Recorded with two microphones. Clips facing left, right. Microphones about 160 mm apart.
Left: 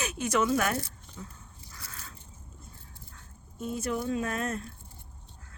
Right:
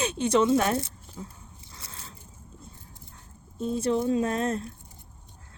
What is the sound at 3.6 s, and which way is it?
Speech, 30° right (ahead or behind).